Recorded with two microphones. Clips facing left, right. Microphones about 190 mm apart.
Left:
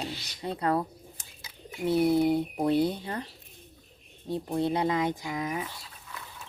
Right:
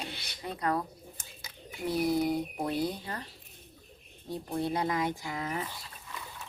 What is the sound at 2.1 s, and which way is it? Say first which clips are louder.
Speech: left 5 dB; 25° left (ahead or behind).